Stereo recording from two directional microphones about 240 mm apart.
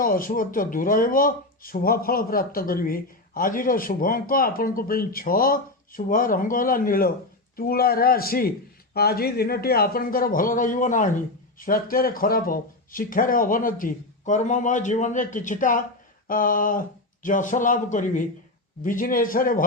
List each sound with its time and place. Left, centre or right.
0.0 s speech: left